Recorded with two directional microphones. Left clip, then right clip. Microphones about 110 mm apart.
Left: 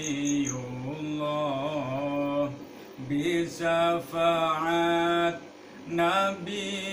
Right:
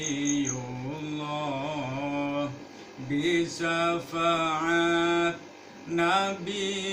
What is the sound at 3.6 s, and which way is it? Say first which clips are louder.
Mantra: left 2 dB; 5° left (ahead or behind).